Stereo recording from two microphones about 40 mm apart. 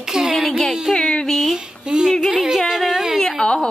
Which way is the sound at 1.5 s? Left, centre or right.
Centre.